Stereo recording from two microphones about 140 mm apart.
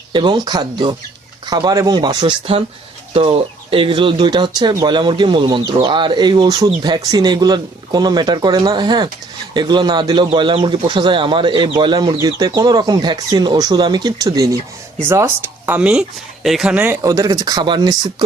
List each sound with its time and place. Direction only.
0.1 s speech: 35° right (ahead or behind); by 17.0 s 10° right (ahead or behind)
17.0 s speech: 25° right (ahead or behind)